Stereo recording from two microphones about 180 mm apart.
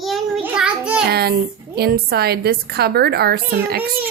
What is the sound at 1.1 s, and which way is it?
A woman's voice, 60° right (ahead or behind).